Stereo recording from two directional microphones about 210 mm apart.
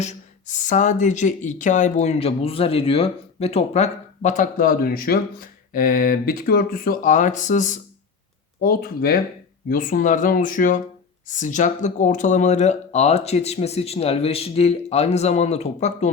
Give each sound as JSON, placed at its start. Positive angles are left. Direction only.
{"t": 0.0, "sound": "speech", "side_deg": 35}